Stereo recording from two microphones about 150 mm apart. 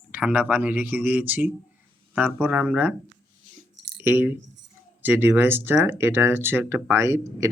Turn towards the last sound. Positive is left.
turn(degrees=-20)  # may be behind; listen again after turning